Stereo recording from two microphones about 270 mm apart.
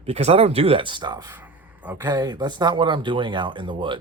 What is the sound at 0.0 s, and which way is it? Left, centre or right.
Speech, right.